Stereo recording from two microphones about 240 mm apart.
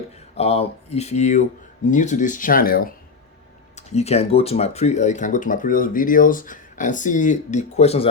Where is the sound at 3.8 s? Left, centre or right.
Left.